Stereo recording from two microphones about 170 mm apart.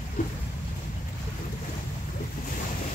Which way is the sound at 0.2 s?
50° left (ahead or behind).